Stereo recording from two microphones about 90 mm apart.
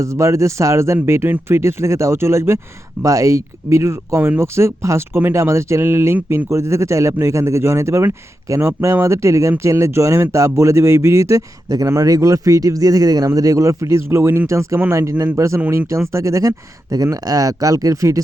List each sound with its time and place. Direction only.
0.0 s speech: 35° right (ahead or behind)
15.4 s speech: 35° right (ahead or behind)